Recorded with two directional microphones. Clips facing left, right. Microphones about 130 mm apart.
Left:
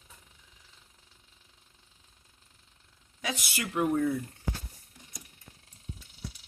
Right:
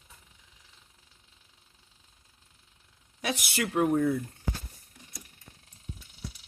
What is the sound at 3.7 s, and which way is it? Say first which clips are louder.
Speech: right 2 dB; 35° right (ahead or behind).